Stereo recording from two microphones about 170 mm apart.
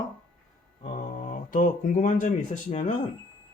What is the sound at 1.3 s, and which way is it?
Speech, 50° left (ahead or behind).